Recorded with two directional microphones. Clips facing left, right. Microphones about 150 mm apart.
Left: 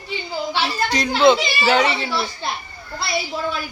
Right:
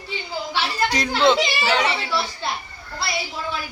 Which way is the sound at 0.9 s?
5° right (ahead or behind).